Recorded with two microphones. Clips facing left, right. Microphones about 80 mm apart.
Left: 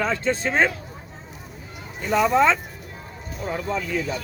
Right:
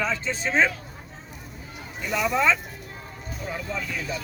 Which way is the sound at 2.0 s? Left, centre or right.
Left.